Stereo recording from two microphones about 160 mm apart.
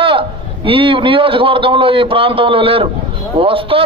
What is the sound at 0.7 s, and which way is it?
A man's voice, 35° right (ahead or behind).